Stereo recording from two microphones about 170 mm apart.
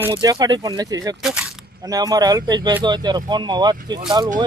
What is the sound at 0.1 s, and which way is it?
Speech, 25° right (ahead or behind).